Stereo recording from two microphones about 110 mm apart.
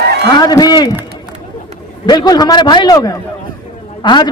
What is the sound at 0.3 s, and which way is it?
Speech, 35° left (ahead or behind).